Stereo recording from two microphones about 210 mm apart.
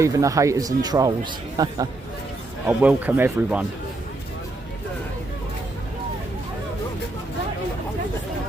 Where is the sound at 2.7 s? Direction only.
5° right (ahead or behind).